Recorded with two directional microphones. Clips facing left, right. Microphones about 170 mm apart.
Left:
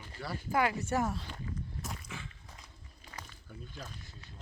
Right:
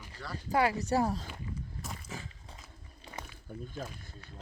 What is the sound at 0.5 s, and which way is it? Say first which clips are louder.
Speech: right 3 dB; 35° right (ahead or behind).